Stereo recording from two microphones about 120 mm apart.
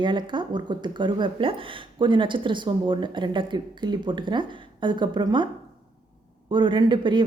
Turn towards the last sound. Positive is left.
turn(degrees=-40)  # may be behind; listen again after turning